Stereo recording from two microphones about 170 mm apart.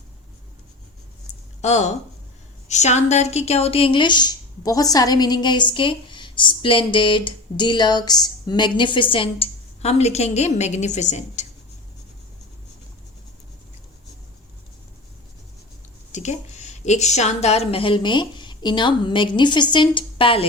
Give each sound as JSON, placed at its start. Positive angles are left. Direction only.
{"t": 1.6, "sound": "a woman's voice", "side_deg": 40}
{"t": 16.1, "sound": "speech", "side_deg": 40}